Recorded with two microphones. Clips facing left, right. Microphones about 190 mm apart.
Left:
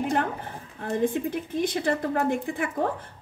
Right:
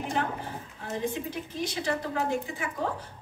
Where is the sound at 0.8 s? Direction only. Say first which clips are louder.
Left 7 dB; 55° left (ahead or behind).